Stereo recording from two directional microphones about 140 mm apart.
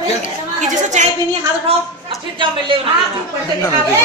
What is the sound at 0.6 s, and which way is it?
Speech, 55° right (ahead or behind).